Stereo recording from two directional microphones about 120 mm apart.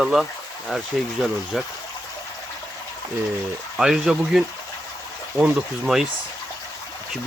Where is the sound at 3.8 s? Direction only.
5° right (ahead or behind).